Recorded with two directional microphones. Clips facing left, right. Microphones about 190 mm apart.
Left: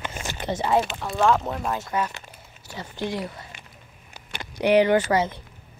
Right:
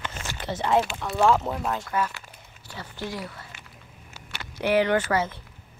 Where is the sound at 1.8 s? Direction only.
20° left (ahead or behind).